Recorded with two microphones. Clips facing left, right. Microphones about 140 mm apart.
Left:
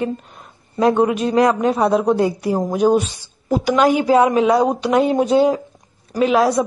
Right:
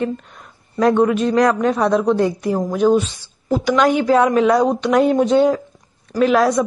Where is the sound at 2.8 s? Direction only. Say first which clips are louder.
Right 1 dB; 15° left (ahead or behind).